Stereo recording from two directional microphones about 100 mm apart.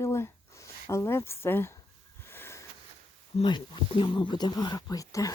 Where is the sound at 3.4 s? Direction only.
50° left (ahead or behind); by 5.3 s 35° left (ahead or behind).